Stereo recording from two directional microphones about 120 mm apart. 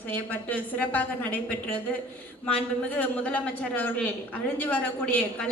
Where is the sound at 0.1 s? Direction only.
15° left (ahead or behind).